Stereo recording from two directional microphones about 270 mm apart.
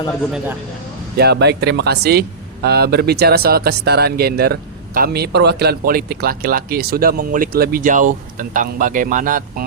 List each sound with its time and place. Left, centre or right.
1.1 s speech: right